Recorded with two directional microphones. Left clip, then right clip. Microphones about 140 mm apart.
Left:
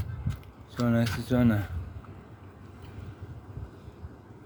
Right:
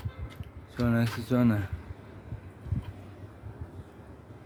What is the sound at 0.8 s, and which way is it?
Speech, 15° left (ahead or behind).